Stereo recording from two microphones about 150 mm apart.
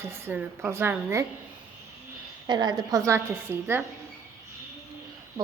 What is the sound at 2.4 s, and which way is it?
A woman's voice, 30° right (ahead or behind).